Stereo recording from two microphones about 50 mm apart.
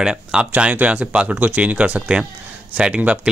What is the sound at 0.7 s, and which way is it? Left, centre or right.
Speech, right.